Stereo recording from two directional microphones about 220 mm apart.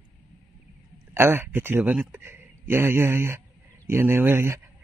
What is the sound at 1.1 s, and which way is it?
Speech, 10° right (ahead or behind).